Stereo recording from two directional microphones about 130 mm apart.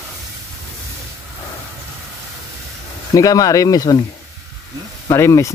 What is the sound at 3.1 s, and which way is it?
Speech, 25° left (ahead or behind).